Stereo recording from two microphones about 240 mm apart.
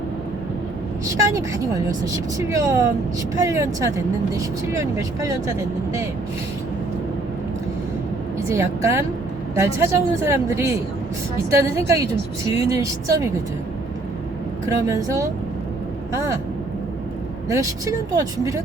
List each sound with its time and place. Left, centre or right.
1.0 s speech: centre
8.4 s a woman's voice: centre
14.8 s speech: centre
17.5 s speech: centre